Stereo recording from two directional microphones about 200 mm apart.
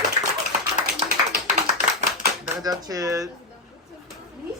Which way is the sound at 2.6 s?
20° right (ahead or behind).